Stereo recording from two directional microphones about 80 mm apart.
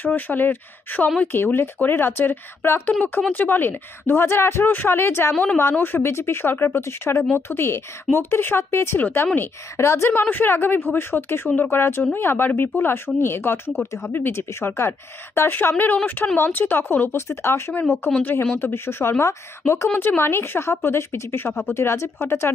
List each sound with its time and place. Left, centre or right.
0.0 s speech: left
19.9 s speech: left